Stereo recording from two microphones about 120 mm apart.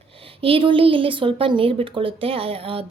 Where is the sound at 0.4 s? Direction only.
45° right (ahead or behind).